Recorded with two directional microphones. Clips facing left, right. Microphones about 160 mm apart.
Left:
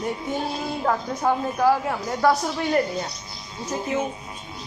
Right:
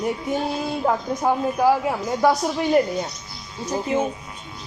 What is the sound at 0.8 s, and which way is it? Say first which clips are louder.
Speech: right 1 dB; 15° right (ahead or behind).